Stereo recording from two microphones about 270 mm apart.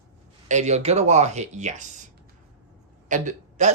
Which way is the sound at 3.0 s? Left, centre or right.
Right.